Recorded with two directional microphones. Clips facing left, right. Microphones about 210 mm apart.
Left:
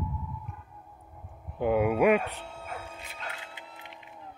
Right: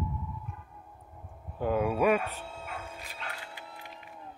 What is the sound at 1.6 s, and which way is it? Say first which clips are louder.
Speech: left 3 dB; 15° left (ahead or behind).